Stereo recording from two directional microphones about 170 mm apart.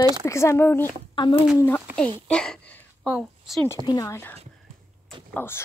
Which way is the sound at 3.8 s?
20° left (ahead or behind).